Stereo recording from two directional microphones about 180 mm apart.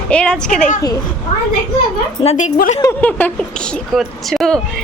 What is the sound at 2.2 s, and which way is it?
Speech, 40° left (ahead or behind).